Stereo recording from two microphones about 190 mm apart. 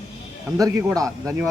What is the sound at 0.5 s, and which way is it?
Speech, 20° right (ahead or behind).